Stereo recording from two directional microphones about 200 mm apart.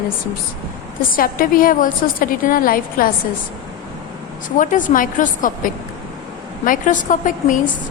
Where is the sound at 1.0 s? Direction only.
45° left (ahead or behind).